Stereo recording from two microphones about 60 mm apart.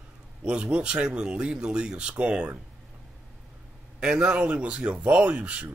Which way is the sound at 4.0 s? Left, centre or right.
Centre.